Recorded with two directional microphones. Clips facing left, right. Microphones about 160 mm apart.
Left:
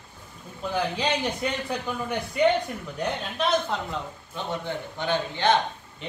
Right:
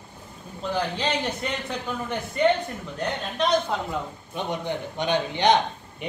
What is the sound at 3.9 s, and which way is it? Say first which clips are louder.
A man's voice: right 3 dB; 15° right (ahead or behind).